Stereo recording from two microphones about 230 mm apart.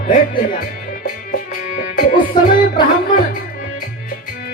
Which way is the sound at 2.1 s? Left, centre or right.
Left.